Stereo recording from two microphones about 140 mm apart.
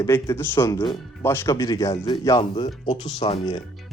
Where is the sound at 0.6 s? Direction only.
30° left (ahead or behind).